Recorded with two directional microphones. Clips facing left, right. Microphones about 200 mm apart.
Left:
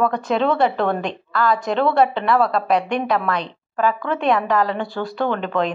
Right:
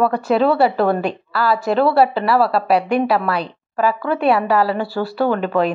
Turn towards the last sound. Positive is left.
turn(degrees=-10)  # may be behind; listen again after turning